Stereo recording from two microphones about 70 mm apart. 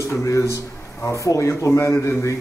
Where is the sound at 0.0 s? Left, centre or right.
Left.